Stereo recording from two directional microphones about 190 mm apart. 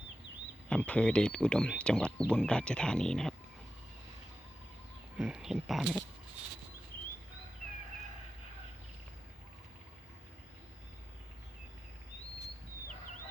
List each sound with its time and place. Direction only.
0.7 s speech: 5° left (ahead or behind)
5.1 s speech: 5° right (ahead or behind)